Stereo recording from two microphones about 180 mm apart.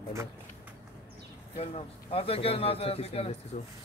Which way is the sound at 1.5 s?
35° left (ahead or behind).